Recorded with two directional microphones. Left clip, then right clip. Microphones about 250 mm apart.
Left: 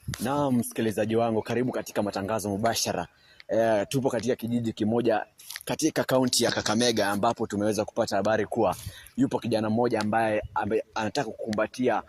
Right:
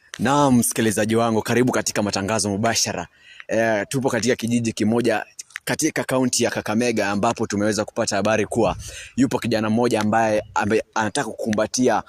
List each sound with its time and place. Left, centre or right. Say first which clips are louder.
0.2 s speech: right 9 dB; right
5.6 s speech: right 4 dB; right
6.2 s speech: right 3 dB; right
11.6 s speech: right 6 dB; right